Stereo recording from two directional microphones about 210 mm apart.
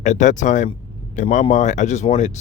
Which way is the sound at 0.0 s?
35° left (ahead or behind).